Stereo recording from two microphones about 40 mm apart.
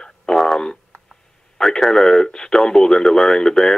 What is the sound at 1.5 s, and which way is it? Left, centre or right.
Speech, centre.